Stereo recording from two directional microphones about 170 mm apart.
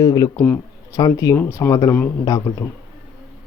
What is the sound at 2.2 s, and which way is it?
Speech, 25° left (ahead or behind).